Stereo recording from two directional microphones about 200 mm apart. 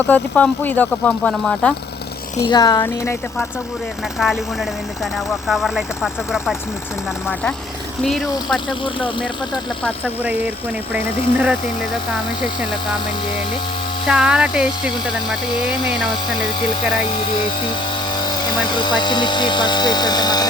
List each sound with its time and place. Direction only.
0.0 s speech: 5° left (ahead or behind)
2.5 s speech: 20° left (ahead or behind)
4.2 s speech: centre (ahead or behind)
8.0 s speech: centre (ahead or behind)
8.8 s speech: 25° left (ahead or behind)
10.0 s speech: 10° right (ahead or behind)
14.1 s speech: 5° right (ahead or behind)
18.1 s speech: 20° left (ahead or behind)